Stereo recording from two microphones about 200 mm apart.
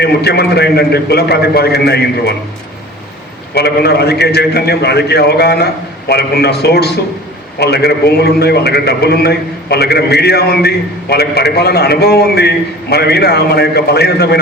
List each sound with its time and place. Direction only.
0.0 s a man's voice: 55° left (ahead or behind)
3.5 s a man's voice: 55° left (ahead or behind)